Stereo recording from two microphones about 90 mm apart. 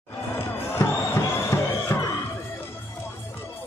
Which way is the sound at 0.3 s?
30° left (ahead or behind).